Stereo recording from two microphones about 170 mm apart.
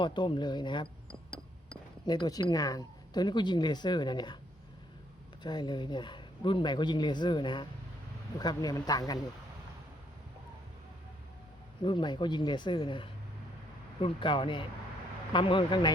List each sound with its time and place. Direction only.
0.0 s speech: 25° left (ahead or behind)
2.0 s speech: 25° left (ahead or behind)
5.4 s speech: 25° left (ahead or behind)
11.8 s speech: 25° left (ahead or behind)